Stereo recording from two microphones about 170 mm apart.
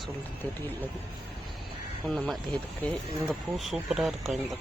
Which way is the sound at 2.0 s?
5° left (ahead or behind).